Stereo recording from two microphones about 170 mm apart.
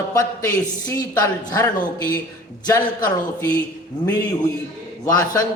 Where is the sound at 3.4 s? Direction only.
20° left (ahead or behind).